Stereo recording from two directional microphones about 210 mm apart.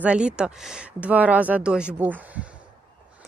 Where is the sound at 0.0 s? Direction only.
5° right (ahead or behind).